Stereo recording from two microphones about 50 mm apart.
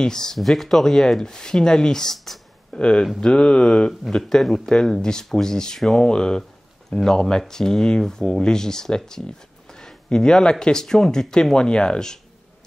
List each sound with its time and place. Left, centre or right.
0.0 s speech: centre
2.7 s speech: centre
3.2 s a sound: centre
4.3 s speech: centre
6.0 s speech: centre